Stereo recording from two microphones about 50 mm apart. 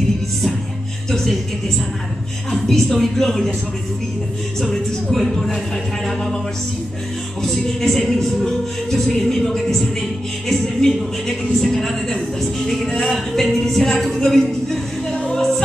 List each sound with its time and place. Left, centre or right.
1.1 s speech: centre
2.5 s speech: centre
5.1 s speech: centre
7.4 s a woman's voice: centre
15.3 s music: centre